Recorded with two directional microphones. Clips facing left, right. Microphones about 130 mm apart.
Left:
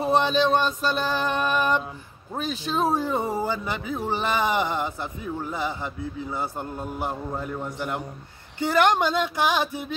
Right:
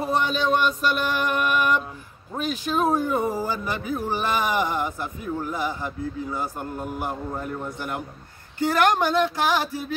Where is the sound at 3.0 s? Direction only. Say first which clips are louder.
Right 1 dB; 25° left (ahead or behind).